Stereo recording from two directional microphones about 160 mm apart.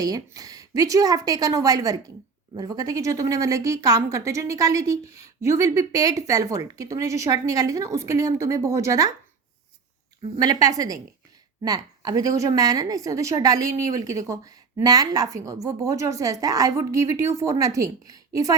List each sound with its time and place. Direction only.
0.0 s a woman's voice: 20° right (ahead or behind)
10.3 s a woman's voice: 25° right (ahead or behind)